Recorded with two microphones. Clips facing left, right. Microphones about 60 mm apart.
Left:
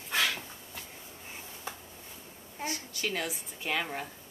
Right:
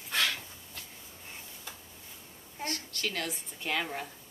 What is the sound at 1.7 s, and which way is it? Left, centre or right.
Tick-tock, left.